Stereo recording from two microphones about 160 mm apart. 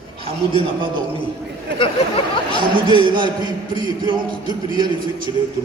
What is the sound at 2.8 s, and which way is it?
Speech, 30° right (ahead or behind).